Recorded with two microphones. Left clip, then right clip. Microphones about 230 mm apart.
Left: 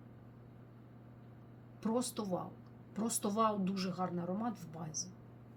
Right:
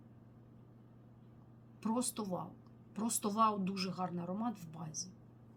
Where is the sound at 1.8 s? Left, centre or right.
Centre.